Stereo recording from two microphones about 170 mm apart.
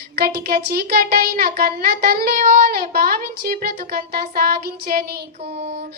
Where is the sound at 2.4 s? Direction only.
55° right (ahead or behind).